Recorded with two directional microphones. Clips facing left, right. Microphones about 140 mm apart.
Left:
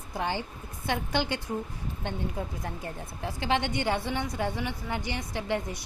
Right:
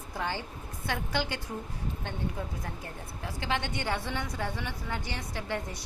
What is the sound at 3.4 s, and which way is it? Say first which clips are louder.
A woman's voice: left 5 dB; 20° left (ahead or behind).